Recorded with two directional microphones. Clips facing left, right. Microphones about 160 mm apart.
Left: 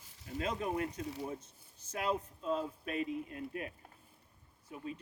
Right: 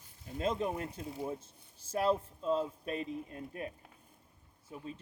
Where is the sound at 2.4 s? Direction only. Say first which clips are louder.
Right 4 dB; 30° right (ahead or behind).